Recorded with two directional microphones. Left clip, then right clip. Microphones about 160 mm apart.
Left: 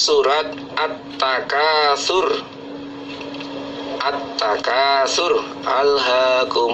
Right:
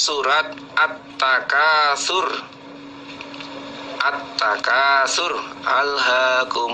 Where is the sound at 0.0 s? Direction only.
35° right (ahead or behind).